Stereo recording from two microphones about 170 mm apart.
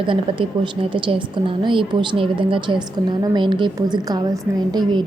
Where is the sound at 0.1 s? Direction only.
30° right (ahead or behind).